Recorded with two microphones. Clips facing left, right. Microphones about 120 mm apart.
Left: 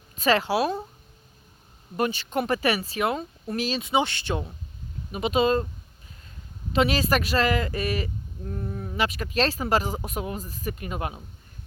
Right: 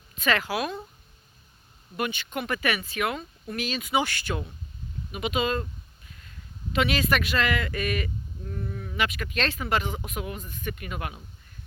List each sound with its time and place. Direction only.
0.2 s speech: 30° left (ahead or behind)
2.0 s speech: 35° left (ahead or behind)
6.7 s speech: 35° left (ahead or behind)